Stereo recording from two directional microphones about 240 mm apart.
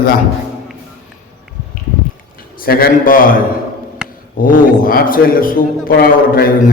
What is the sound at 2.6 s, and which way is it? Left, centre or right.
Speech, left.